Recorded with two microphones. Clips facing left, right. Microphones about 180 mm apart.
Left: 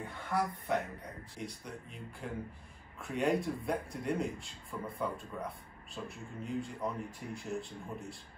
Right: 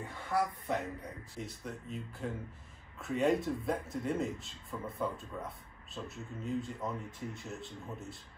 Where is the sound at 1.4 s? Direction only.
5° right (ahead or behind).